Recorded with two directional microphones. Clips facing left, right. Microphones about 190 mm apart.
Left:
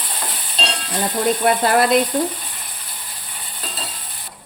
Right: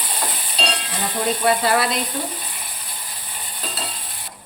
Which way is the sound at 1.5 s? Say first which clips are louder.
Left 3 dB; 50° left (ahead or behind).